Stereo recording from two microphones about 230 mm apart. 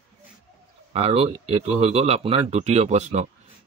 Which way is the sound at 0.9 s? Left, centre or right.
Right.